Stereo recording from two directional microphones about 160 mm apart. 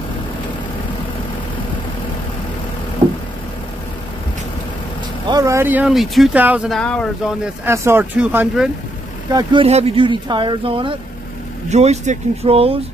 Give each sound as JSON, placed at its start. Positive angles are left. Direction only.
{"t": 5.3, "sound": "speech", "side_deg": -20}
{"t": 6.8, "sound": "speech", "side_deg": 5}
{"t": 7.4, "sound": "speech", "side_deg": -15}
{"t": 9.3, "sound": "speech", "side_deg": -25}
{"t": 11.7, "sound": "speech", "side_deg": -45}